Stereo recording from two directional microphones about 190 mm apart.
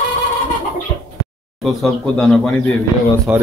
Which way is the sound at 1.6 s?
Centre (ahead or behind).